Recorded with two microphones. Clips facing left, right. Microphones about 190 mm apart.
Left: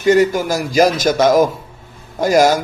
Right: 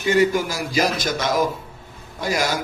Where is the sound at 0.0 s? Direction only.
45° left (ahead or behind).